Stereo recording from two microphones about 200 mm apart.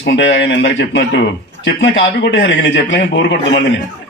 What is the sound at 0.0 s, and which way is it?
A man's voice, 70° left (ahead or behind).